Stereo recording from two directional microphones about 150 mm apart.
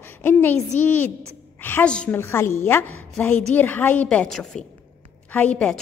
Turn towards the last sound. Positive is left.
turn(degrees=5)  # may be behind; listen again after turning